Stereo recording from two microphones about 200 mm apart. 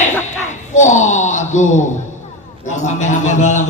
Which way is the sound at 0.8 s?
35° left (ahead or behind).